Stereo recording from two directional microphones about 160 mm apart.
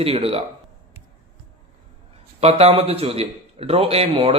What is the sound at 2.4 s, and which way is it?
A man's voice, 40° right (ahead or behind).